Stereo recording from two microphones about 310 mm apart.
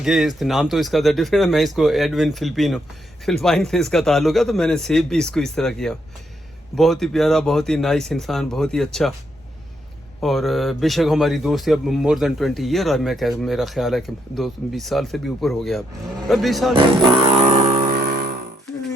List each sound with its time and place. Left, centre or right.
0.0 s speech: centre
10.2 s speech: centre
17.2 s music: right